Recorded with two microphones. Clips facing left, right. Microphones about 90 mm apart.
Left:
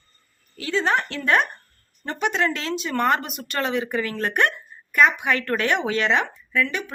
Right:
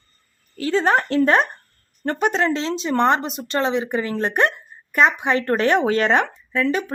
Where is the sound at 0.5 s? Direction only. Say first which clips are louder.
Right 4 dB; 40° right (ahead or behind).